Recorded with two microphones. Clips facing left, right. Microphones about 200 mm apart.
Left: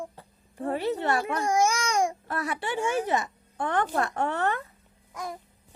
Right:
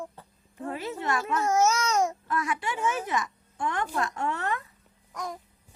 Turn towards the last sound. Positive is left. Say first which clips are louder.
# even
turn(degrees=5)  # may be behind; listen again after turning